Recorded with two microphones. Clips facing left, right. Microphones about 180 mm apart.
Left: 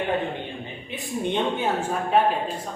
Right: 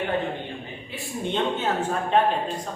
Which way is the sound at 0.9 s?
20° left (ahead or behind).